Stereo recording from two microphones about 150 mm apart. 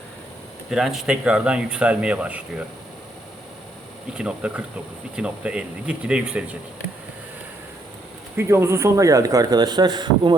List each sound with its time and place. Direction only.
0.7 s speech: centre (ahead or behind)
4.1 s speech: 5° right (ahead or behind)
8.4 s speech: 15° right (ahead or behind)